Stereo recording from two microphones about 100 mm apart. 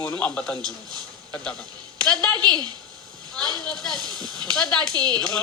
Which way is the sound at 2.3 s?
45° right (ahead or behind).